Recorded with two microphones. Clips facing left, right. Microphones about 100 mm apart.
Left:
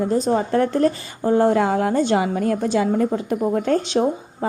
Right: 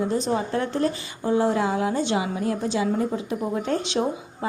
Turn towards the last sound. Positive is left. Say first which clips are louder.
# left 6 dB
turn(degrees=50)  # may be behind; listen again after turning